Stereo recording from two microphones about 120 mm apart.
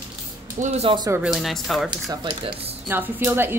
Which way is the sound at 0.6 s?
60° right (ahead or behind).